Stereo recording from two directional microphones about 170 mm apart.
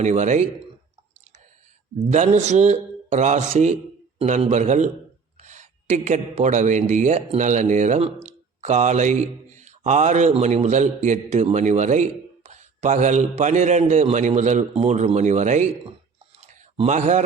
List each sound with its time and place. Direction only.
0.0 s speech: 45° right (ahead or behind)
2.0 s speech: 45° right (ahead or behind)
16.4 s a sound: 40° right (ahead or behind)